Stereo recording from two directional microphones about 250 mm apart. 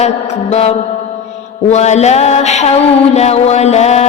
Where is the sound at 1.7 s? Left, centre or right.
Left.